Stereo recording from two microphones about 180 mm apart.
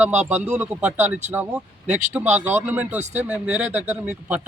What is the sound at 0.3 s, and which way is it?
Speech, 10° right (ahead or behind).